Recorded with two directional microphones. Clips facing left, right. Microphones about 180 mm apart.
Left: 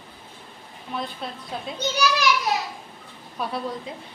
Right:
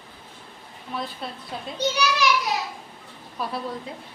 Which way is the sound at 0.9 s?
Centre (ahead or behind).